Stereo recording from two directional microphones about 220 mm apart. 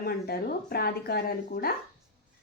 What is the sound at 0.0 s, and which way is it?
Speech, 45° left (ahead or behind).